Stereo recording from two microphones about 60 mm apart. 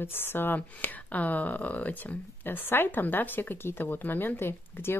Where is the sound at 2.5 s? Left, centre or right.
Left.